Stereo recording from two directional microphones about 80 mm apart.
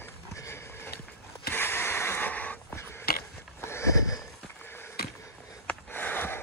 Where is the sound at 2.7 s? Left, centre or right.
Left.